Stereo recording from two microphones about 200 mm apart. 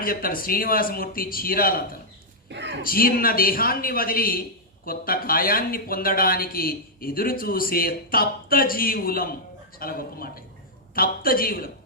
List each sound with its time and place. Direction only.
0.0 s speech: 45° left (ahead or behind)
2.5 s a sound: 60° right (ahead or behind)
2.8 s speech: 45° left (ahead or behind)